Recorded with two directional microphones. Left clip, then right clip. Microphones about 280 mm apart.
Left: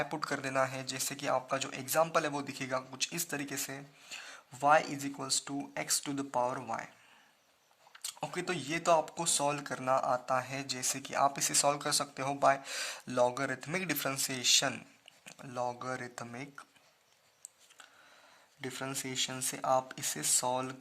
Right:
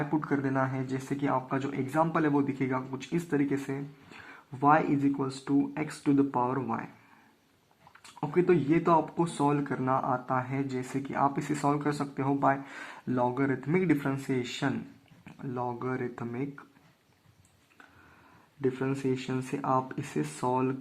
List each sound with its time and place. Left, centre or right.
0.1 s speech: left
8.2 s speech: left
18.6 s speech: left